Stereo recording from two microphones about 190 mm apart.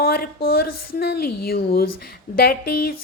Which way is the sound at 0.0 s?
50° left (ahead or behind).